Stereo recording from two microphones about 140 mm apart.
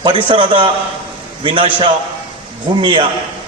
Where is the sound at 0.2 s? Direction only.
40° right (ahead or behind).